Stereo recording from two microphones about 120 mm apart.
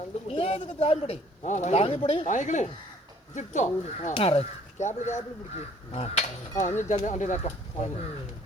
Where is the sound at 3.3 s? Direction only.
80° left.